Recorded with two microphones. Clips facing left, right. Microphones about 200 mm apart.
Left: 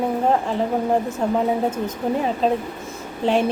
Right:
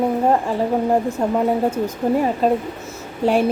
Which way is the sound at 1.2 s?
5° right (ahead or behind).